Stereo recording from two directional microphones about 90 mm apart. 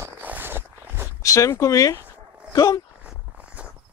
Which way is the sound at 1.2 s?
35° left (ahead or behind).